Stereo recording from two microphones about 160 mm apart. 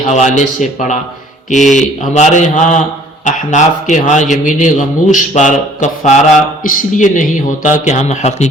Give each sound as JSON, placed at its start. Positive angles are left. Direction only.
{"t": 0.0, "sound": "a man's voice", "side_deg": 50}